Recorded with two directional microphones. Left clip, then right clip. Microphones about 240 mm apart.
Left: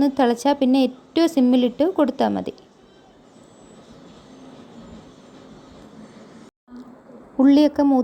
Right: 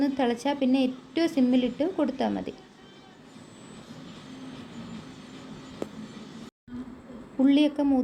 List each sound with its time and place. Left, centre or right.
0.0 s a woman's voice: left
7.3 s a woman's voice: left